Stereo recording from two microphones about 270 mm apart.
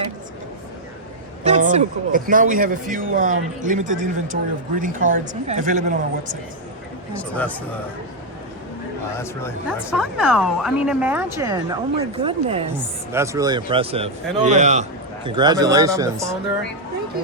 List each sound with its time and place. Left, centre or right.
1.5 s a man's voice: right
7.2 s speech: centre
9.1 s speech: centre
9.6 s speech: centre; by 12.5 s right
13.1 s a man's voice: centre